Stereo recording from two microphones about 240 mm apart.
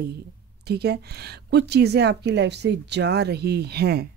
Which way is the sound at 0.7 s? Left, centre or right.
Right.